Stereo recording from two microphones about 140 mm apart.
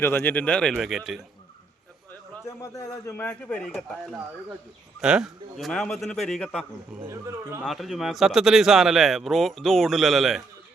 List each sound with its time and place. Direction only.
0.0 s speech: 15° left (ahead or behind); by 1.2 s centre (ahead or behind)
2.6 s a man's voice: 25° left (ahead or behind)
3.2 s speech: 10° left (ahead or behind)
4.9 s a man's voice: 5° right (ahead or behind)
7.1 s speech: 20° right (ahead or behind)
7.6 s a man's voice: centre (ahead or behind)